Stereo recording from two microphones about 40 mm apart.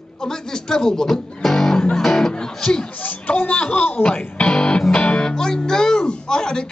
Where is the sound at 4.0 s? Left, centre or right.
Left.